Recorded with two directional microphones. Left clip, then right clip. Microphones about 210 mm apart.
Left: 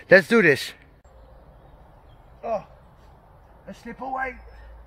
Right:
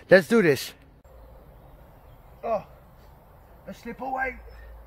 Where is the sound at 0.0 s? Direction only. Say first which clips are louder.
Left 2 dB; 5° right (ahead or behind).